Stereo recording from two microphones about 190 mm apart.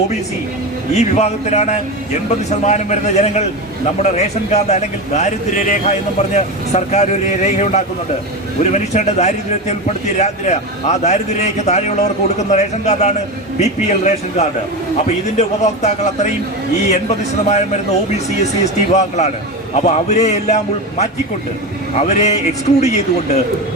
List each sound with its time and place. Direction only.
0.9 s a man's voice: 35° left (ahead or behind)
21.9 s a man's voice: 35° left (ahead or behind)